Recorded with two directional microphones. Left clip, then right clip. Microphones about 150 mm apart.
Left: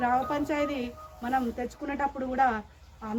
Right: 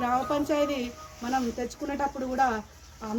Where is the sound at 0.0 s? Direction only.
Centre (ahead or behind).